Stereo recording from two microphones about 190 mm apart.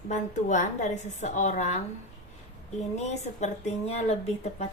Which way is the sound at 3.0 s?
35° left (ahead or behind).